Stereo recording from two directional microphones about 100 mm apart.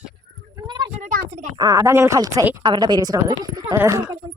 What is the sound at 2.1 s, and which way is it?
A woman's voice, 40° right (ahead or behind).